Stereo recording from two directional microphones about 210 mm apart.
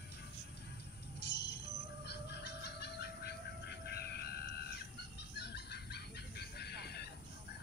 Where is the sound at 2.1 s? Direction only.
50° left (ahead or behind).